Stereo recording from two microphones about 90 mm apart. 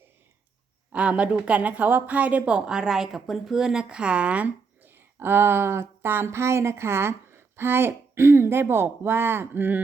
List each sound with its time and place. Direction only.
0.9 s a woman's voice: 15° right (ahead or behind)